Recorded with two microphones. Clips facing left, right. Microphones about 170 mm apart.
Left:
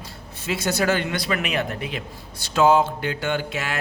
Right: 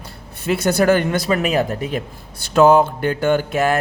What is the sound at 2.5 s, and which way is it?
Speech, 55° right (ahead or behind).